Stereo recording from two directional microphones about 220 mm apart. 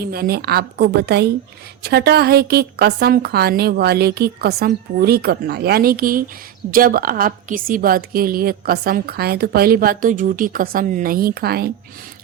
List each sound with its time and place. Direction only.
0.0 s a woman's voice: 45° right (ahead or behind)